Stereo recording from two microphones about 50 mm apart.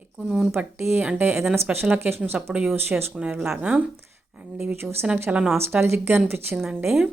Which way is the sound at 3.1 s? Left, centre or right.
Right.